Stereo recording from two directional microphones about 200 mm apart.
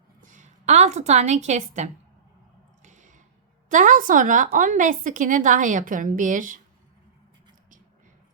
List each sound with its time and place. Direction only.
0.2 s a woman's voice: 40° right (ahead or behind)
2.8 s a sound: 40° right (ahead or behind)
3.7 s a woman's voice: 40° right (ahead or behind)